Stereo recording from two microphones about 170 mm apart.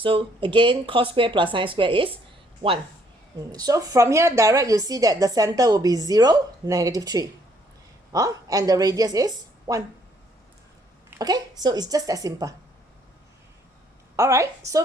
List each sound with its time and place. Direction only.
0.0 s a woman's voice: 30° right (ahead or behind)
3.5 s a woman's voice: 20° right (ahead or behind)
11.2 s a woman's voice: 20° right (ahead or behind)
14.2 s a woman's voice: 15° right (ahead or behind)